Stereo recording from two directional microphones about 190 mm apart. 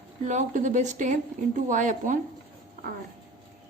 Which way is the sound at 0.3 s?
40° right (ahead or behind).